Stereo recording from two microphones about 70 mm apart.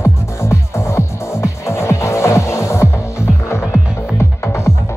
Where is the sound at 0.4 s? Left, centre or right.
Left.